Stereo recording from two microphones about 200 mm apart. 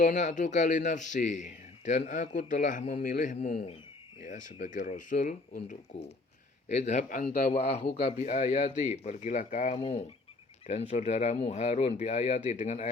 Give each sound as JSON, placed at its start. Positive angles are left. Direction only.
{"t": 0.0, "sound": "speech", "side_deg": 35}